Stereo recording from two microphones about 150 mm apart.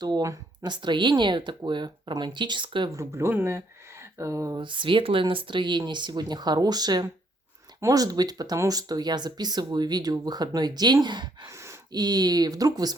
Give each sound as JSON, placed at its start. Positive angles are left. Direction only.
{"t": 0.0, "sound": "speech", "side_deg": -25}
{"t": 2.9, "sound": "speech", "side_deg": -20}
{"t": 4.6, "sound": "speech", "side_deg": -35}
{"t": 11.5, "sound": "speech", "side_deg": -20}